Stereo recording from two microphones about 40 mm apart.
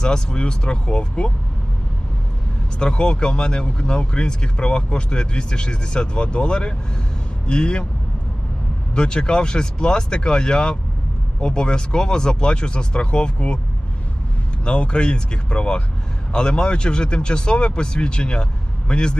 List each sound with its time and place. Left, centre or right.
0.0 s speech: left
2.7 s speech: left
9.0 s speech: left
14.6 s speech: left